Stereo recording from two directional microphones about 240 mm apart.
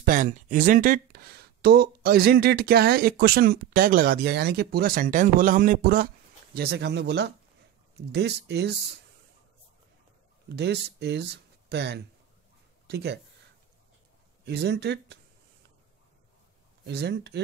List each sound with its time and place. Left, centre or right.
0.0 s speech: right
10.5 s speech: right
14.4 s speech: right
16.8 s speech: right